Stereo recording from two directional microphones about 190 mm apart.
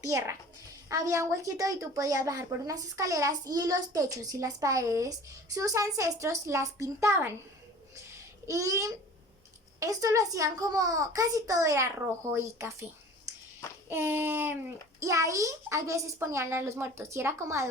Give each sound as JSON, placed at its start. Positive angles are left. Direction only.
{"t": 0.0, "sound": "a woman's voice", "side_deg": -15}
{"t": 7.9, "sound": "a sound", "side_deg": -15}
{"t": 9.8, "sound": "a woman's voice", "side_deg": -15}
{"t": 13.9, "sound": "a woman's voice", "side_deg": -10}